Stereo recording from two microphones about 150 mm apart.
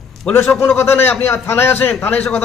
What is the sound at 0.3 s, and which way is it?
A man's voice, 15° left (ahead or behind).